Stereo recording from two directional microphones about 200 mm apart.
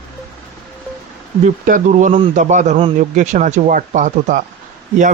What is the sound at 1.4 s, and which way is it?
Speech, 40° right (ahead or behind).